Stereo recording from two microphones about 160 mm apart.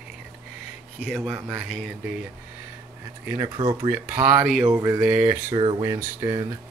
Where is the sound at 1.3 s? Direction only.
5° right (ahead or behind).